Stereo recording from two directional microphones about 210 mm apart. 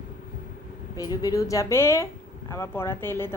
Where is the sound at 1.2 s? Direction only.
15° left (ahead or behind).